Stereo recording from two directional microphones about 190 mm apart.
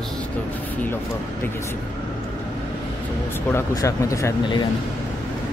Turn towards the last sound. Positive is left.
turn(degrees=20)  # may be behind; listen again after turning